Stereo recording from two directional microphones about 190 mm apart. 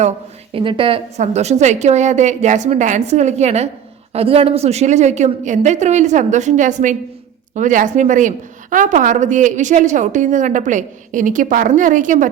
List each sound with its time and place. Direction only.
0.5 s a woman's voice: 25° right (ahead or behind); by 12.3 s 40° right (ahead or behind)